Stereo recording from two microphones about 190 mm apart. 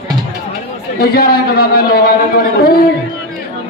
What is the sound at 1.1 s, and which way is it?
Speech, 50° left (ahead or behind).